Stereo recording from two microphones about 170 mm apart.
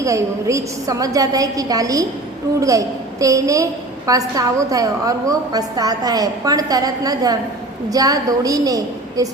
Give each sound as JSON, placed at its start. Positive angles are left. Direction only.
{"t": 0.0, "sound": "a woman's voice", "side_deg": -20}